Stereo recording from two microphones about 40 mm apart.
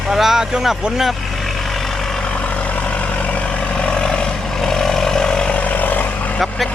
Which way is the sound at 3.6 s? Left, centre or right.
Left.